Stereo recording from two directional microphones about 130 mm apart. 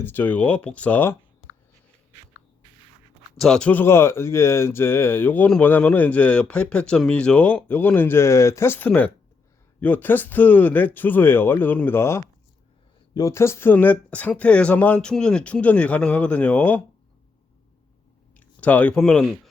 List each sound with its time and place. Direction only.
0.0 s speech: 15° left (ahead or behind)
3.3 s speech: 5° left (ahead or behind)
18.3 s speech: 10° left (ahead or behind)